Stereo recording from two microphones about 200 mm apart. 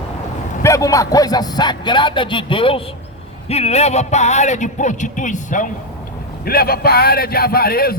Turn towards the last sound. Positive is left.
turn(degrees=50)  # may be behind; listen again after turning